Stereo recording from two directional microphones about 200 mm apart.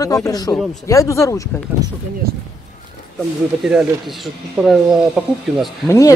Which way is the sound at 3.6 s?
Centre (ahead or behind).